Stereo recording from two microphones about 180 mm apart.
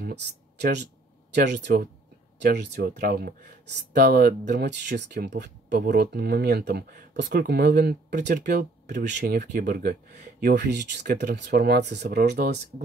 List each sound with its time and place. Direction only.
0.0 s a sound: 65° right (ahead or behind)
1.6 s speech: 65° right (ahead or behind)
8.5 s speech: 45° right (ahead or behind)
8.9 s speech: 65° right (ahead or behind)
10.4 s speech: 70° right (ahead or behind)